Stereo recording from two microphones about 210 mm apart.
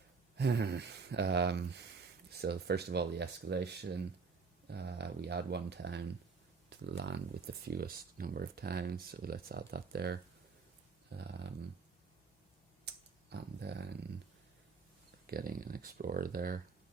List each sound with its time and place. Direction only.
0.3 s speech: 55° right (ahead or behind)
13.3 s speech: 50° right (ahead or behind)
15.3 s speech: 45° right (ahead or behind)